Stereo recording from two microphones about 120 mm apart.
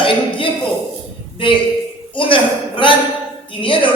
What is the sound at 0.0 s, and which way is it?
Speech, 45° left (ahead or behind).